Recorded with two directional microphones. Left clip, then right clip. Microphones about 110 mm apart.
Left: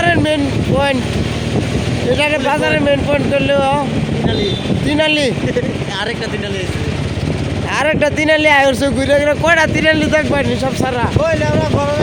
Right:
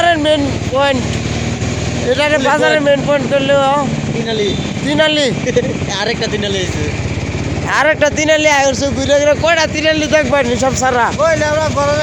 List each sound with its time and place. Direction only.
0.0 s vehicle: 20° left (ahead or behind)
2.1 s speech: 20° left (ahead or behind)
4.9 s speech: 25° left (ahead or behind)
7.7 s speech: 30° left (ahead or behind); by 9.0 s 55° left (ahead or behind)
9.0 s speech: 45° left (ahead or behind)
10.6 s speech: 10° right (ahead or behind)
11.2 s speech: 35° right (ahead or behind)